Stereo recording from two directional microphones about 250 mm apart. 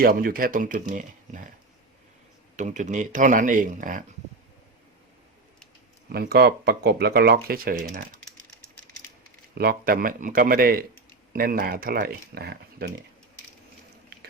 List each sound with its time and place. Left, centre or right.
0.0 s speech: right
2.6 s speech: right
6.1 s speech: right
9.6 s speech: right